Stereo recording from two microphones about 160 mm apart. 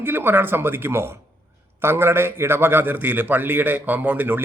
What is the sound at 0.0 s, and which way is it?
Speech, 15° right (ahead or behind).